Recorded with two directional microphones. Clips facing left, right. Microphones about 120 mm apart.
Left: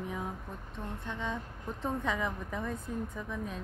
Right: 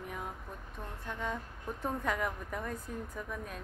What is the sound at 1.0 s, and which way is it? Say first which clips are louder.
A woman's voice: right 1 dB; 5° right (ahead or behind).